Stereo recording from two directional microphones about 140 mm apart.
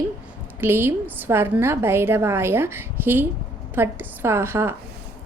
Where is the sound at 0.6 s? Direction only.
15° right (ahead or behind).